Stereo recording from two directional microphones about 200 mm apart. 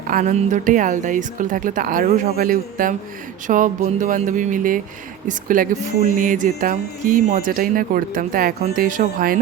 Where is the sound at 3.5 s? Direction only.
40° right (ahead or behind).